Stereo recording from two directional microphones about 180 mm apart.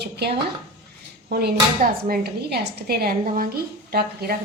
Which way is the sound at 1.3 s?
60° right (ahead or behind).